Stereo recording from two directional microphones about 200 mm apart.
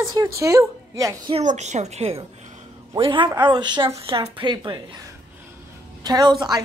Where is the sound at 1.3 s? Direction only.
35° right (ahead or behind).